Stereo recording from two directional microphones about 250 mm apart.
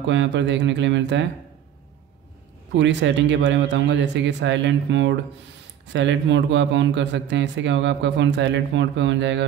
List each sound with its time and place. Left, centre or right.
0.0 s a man's voice: right
2.7 s a man's voice: right